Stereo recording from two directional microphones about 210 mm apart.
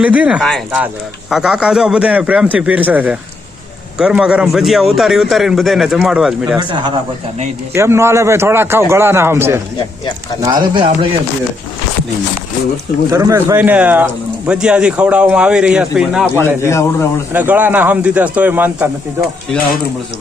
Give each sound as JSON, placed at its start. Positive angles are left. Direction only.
{"t": 0.0, "sound": "speech", "side_deg": -5}
{"t": 6.6, "sound": "speech", "side_deg": -20}
{"t": 13.1, "sound": "speech", "side_deg": -15}
{"t": 16.6, "sound": "a man's voice", "side_deg": 15}
{"t": 17.3, "sound": "speech", "side_deg": -10}